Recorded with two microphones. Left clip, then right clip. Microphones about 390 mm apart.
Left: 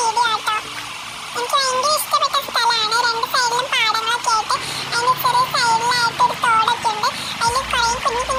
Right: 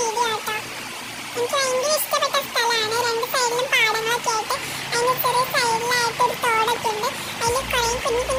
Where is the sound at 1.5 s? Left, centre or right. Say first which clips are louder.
Left 4 dB; right.